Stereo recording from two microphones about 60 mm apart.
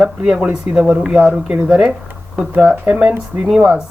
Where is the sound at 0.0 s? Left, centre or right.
Centre.